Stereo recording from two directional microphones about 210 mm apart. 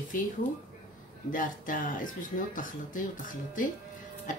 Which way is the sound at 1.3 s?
40° left (ahead or behind).